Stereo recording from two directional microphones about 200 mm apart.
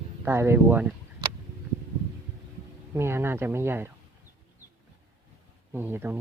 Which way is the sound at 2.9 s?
10° right (ahead or behind).